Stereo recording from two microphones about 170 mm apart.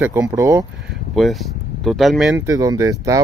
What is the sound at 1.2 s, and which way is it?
Speech, centre (ahead or behind).